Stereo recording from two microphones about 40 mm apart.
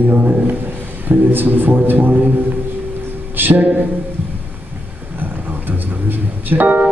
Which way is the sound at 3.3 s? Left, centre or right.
Right.